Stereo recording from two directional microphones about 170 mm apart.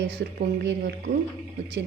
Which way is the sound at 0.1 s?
85° right.